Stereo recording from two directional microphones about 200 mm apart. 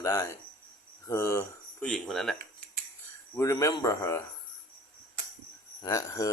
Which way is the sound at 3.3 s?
15° left (ahead or behind).